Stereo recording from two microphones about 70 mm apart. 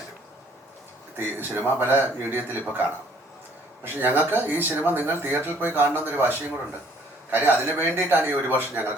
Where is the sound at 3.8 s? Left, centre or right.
Right.